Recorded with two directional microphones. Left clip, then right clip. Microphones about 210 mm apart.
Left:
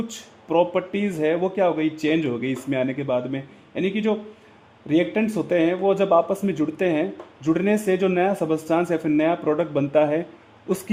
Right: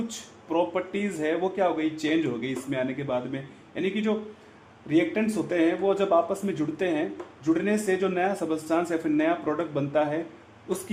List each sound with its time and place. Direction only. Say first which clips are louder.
0.1 s speech: left 6 dB; 40° left (ahead or behind)